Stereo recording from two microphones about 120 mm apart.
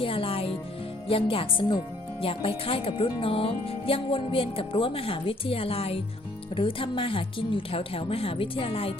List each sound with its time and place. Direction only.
0.0 s music: 50° left (ahead or behind)
1.0 s speech: 50° left (ahead or behind)